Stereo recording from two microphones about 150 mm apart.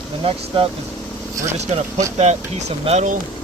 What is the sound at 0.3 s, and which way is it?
Speech, 35° right (ahead or behind).